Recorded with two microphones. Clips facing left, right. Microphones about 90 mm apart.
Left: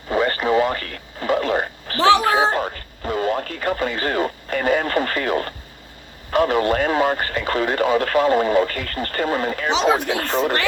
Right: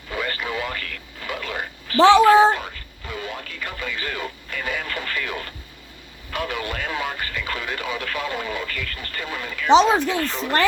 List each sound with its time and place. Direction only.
0.1 s radio: 35° left (ahead or behind)
2.3 s speech: 40° left (ahead or behind)